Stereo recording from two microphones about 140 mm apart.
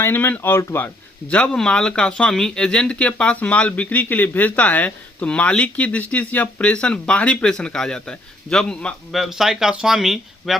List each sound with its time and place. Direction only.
0.0 s speech: 15° left (ahead or behind)
1.3 s speech: 5° left (ahead or behind)